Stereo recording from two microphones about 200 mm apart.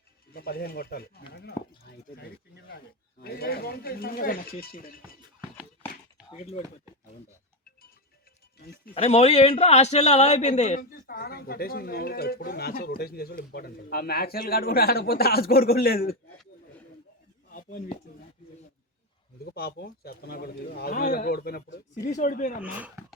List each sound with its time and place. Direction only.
0.3 s a man's voice: 50° left (ahead or behind)
6.3 s speech: 30° left (ahead or behind)
9.0 s a man's voice: 30° left (ahead or behind); by 16.1 s 50° left (ahead or behind)
17.5 s a sound: 45° left (ahead or behind)
19.5 s a man's voice: 55° left (ahead or behind)
22.1 s speech: 40° left (ahead or behind)
22.6 s speech: 5° right (ahead or behind)